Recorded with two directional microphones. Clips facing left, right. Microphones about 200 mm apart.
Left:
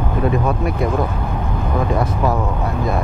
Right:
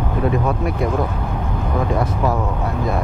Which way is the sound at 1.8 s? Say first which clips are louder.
Left 1 dB; 25° left (ahead or behind).